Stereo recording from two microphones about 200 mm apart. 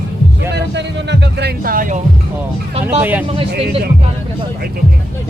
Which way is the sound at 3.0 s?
10° right (ahead or behind).